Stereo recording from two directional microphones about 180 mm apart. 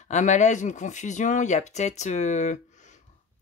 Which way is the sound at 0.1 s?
40° left (ahead or behind).